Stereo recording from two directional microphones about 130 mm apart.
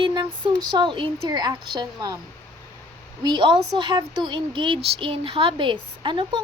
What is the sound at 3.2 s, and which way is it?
Speech, 35° right (ahead or behind).